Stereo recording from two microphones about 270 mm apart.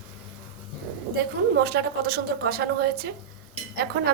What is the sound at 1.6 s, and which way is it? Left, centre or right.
A woman's voice, right.